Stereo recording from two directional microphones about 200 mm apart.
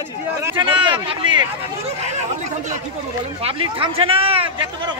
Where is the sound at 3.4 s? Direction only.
30° right (ahead or behind).